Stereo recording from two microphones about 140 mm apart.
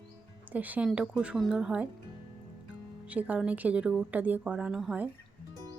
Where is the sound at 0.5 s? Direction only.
10° right (ahead or behind).